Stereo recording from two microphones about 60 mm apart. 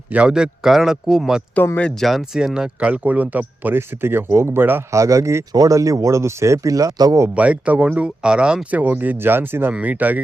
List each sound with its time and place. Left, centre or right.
0.3 s speech: centre
2.8 s speech: right
3.8 s speech: right
4.9 s speech: right
5.5 s speech: right
7.3 s speech: right
8.8 s speech: right
9.7 s speech: right